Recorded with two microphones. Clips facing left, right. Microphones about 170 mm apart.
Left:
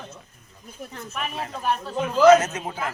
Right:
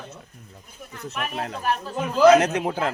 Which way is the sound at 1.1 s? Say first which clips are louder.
Right 3 dB; 60° right (ahead or behind).